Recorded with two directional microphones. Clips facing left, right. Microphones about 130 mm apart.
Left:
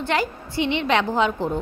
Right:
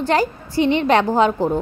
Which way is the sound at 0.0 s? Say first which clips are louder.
Right 5 dB; 40° right (ahead or behind).